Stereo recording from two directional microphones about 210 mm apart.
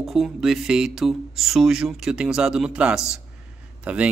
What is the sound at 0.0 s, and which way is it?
Speech, centre (ahead or behind).